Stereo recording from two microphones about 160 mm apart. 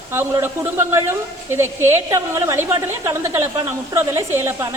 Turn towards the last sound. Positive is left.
turn(degrees=-15)  # may be behind; listen again after turning